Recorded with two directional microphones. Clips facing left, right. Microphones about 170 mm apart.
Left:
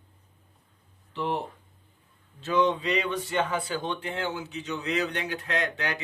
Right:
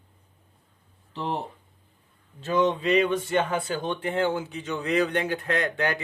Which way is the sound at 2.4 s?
45° right (ahead or behind).